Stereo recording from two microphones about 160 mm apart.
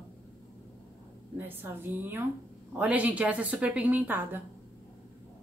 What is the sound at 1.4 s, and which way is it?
A woman's voice, 15° right (ahead or behind).